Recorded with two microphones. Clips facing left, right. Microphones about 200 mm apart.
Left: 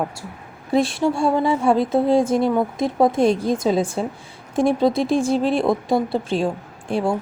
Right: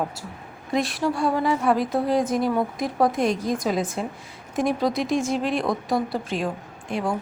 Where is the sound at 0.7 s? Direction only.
30° left (ahead or behind).